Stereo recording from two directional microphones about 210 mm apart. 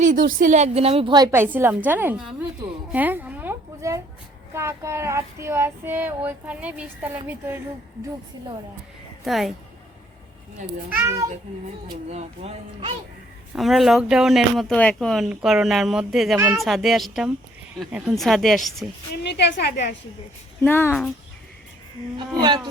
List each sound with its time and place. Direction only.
0.0 s a woman's voice: 40° right (ahead or behind); by 2.5 s 5° right (ahead or behind)
2.9 s a sound: 10° right (ahead or behind)
4.5 s child singing: 15° right (ahead or behind)
9.2 s speech: centre (ahead or behind)
10.8 s child singing: 10° right (ahead or behind)
11.5 s speech: 30° right (ahead or behind)
13.6 s speech: centre (ahead or behind)
19.1 s a woman's voice: 55° left (ahead or behind)
20.6 s speech: 10° left (ahead or behind)